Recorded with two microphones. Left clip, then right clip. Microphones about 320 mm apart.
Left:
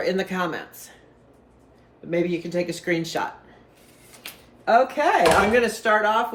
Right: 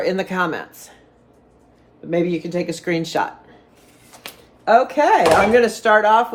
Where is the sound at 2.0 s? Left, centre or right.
Right.